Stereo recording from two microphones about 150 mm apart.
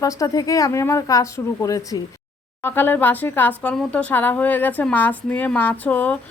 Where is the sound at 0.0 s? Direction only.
25° left (ahead or behind).